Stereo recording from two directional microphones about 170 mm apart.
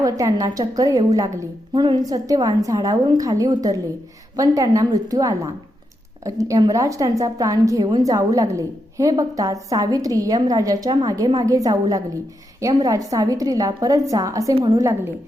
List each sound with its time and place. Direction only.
0.0 s a woman's voice: 20° right (ahead or behind)